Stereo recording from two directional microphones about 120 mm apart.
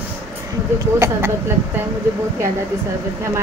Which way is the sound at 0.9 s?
25° right (ahead or behind).